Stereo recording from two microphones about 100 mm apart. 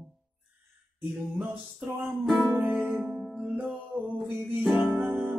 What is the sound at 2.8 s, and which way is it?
Music, 15° right (ahead or behind).